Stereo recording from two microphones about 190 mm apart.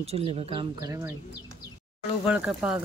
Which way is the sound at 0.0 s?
30° right (ahead or behind).